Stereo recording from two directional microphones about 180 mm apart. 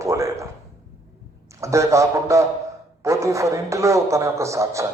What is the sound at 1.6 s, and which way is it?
A man's voice, 15° right (ahead or behind).